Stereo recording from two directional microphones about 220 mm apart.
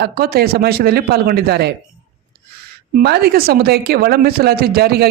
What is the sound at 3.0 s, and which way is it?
Speech, 45° right (ahead or behind).